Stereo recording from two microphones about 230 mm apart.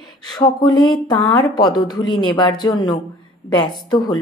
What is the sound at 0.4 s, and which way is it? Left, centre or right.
Speech, centre.